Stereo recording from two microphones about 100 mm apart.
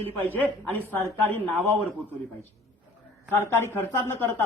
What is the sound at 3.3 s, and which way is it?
A man's voice, 25° left (ahead or behind).